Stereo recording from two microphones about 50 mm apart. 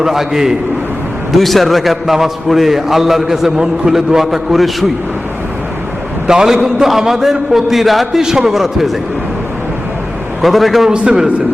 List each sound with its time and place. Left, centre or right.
0.0 s a man's voice: centre
6.2 s a man's voice: centre
10.4 s a man's voice: centre
10.8 s a man's voice: centre